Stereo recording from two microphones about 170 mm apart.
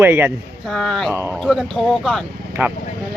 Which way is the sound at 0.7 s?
Centre (ahead or behind).